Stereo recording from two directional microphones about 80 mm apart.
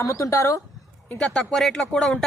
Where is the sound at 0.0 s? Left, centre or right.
Left.